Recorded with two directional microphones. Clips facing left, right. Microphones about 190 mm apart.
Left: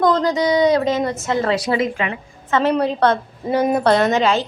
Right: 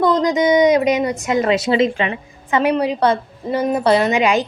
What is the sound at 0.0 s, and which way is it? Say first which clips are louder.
A woman's voice: right 1 dB; 15° right (ahead or behind).